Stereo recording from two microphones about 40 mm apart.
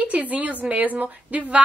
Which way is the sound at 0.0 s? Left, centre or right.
Right.